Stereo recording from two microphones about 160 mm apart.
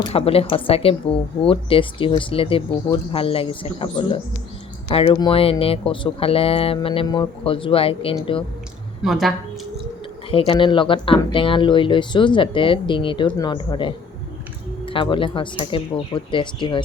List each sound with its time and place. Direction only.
0.1 s speech: 35° left (ahead or behind)
9.0 s a woman's voice: centre (ahead or behind)
10.3 s speech: 35° left (ahead or behind)